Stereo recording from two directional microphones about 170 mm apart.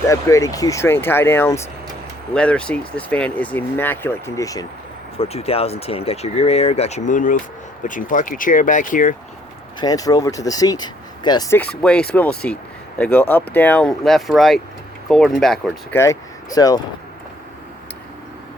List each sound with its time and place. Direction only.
0.1 s speech: 20° left (ahead or behind)
5.1 s speech: 35° left (ahead or behind)
9.8 s speech: 20° left (ahead or behind)
11.8 s speech: 5° left (ahead or behind)
15.9 s speech: 15° left (ahead or behind)